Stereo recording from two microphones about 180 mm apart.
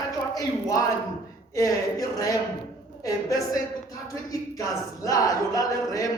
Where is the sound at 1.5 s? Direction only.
20° left (ahead or behind).